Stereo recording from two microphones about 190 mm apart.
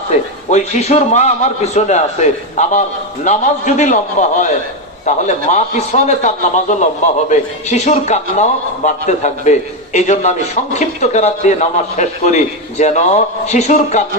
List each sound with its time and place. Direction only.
0.5 s a man's voice: 35° left (ahead or behind)